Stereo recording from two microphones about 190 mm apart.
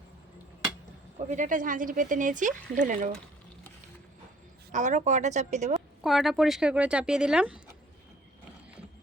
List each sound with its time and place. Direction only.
1.2 s speech: 40° right (ahead or behind)
4.7 s a woman's voice: 40° right (ahead or behind)
6.0 s speech: centre (ahead or behind)